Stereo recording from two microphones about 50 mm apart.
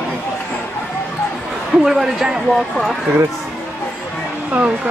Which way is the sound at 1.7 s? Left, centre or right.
Centre.